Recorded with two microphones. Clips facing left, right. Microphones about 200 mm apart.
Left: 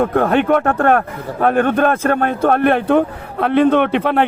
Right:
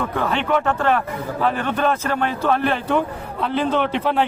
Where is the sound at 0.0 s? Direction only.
50° left (ahead or behind).